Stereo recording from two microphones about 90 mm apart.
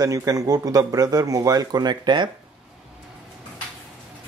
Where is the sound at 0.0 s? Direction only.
40° right (ahead or behind); by 2.2 s 55° right (ahead or behind).